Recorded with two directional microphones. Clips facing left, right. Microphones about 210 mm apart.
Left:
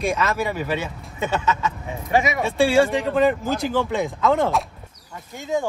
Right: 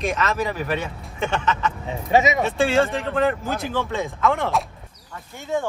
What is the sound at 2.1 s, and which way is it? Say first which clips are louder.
Speech: right 2 dB; 20° right (ahead or behind).